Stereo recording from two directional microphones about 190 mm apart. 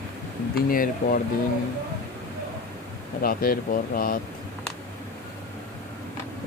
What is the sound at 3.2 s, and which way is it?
Speech, 50° left (ahead or behind).